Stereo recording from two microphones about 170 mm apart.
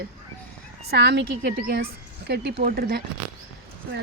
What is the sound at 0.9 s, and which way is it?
A woman's voice, 90° right.